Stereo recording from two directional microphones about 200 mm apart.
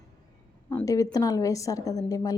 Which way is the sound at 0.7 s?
15° left (ahead or behind).